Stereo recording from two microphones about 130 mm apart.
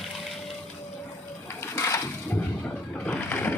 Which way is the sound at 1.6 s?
25° left (ahead or behind).